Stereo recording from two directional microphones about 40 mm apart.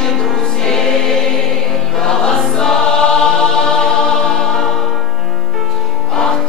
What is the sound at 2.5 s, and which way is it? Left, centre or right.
Choir, centre.